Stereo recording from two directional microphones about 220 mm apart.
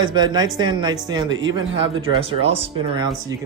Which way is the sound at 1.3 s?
60° right (ahead or behind).